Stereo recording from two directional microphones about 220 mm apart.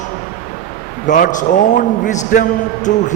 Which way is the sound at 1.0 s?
35° left (ahead or behind).